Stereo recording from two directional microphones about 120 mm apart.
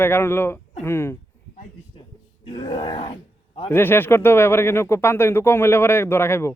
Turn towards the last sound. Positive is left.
turn(degrees=20)  # may be behind; listen again after turning